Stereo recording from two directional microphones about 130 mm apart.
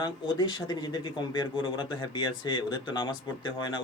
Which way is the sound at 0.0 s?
35° left (ahead or behind).